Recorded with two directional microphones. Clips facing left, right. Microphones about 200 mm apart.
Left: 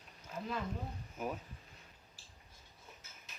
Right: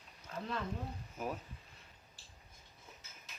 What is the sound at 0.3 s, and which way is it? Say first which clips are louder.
Speech: even; 5° left (ahead or behind).